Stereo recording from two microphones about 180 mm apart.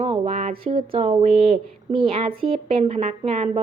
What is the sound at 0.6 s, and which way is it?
A woman's voice, 30° right (ahead or behind).